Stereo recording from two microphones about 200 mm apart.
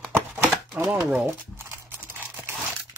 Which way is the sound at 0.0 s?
5° left (ahead or behind).